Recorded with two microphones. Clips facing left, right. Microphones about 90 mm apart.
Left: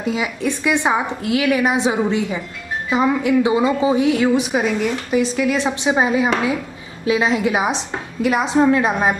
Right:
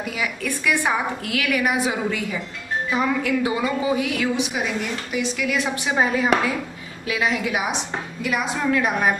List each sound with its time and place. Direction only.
0.0 s a woman's voice: 25° left (ahead or behind)